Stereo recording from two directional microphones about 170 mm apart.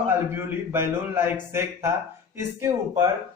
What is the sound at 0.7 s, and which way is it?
A man's voice, 15° right (ahead or behind).